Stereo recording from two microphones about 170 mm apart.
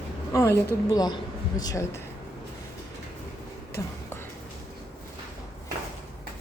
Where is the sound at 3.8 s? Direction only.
20° left (ahead or behind).